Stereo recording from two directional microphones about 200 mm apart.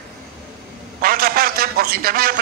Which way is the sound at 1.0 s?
50° right (ahead or behind).